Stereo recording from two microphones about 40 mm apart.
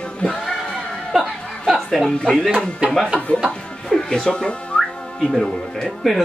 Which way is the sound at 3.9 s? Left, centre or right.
Centre.